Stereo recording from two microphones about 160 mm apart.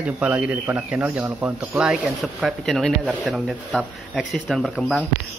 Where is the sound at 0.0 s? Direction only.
10° right (ahead or behind).